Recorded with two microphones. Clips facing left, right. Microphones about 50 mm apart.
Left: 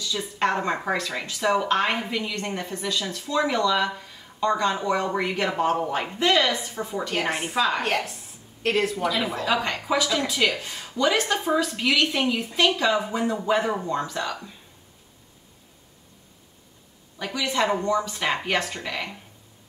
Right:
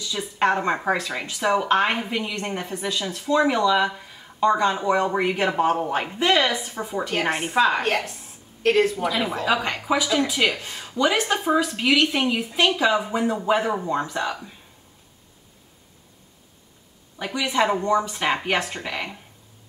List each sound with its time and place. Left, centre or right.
0.0 s a woman's voice: centre
17.2 s speech: centre